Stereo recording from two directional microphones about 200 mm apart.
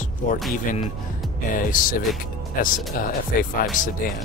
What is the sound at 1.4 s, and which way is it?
Speech, 40° left (ahead or behind).